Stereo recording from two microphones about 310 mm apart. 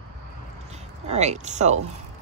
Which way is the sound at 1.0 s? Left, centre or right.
Right.